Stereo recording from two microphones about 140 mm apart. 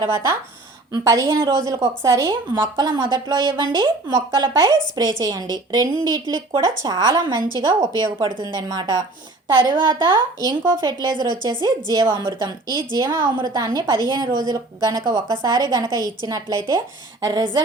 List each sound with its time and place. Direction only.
0.1 s a woman's voice: 20° right (ahead or behind)